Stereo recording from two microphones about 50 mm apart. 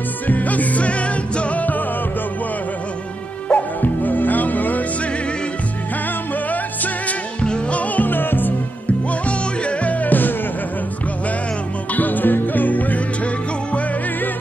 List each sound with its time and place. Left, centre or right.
0.3 s music: left
3.4 s music: left
6.5 s music: left
7.4 s music: left
9.3 s music: left
11.9 s music: left